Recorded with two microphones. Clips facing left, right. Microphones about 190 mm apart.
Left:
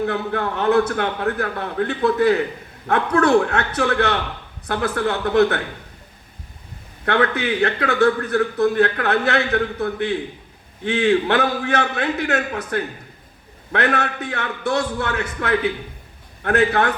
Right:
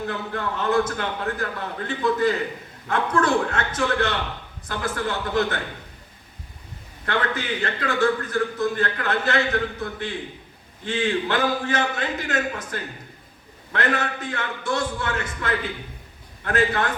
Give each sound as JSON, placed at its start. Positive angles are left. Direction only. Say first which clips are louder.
{"t": 0.1, "sound": "a man's voice", "louder": "left 5 dB", "side_deg": 60}
{"t": 7.0, "sound": "a man's voice", "louder": "left 6 dB", "side_deg": 60}